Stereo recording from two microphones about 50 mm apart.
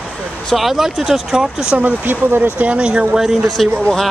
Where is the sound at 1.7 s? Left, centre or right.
Right.